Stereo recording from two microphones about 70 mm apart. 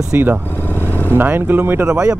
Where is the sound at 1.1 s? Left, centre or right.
Right.